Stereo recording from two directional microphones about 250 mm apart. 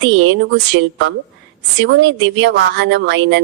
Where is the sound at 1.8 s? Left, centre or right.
Right.